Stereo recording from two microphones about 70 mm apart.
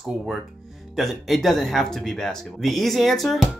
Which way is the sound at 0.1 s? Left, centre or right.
Centre.